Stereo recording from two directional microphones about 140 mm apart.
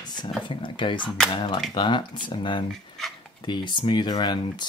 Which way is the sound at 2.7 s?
Centre (ahead or behind).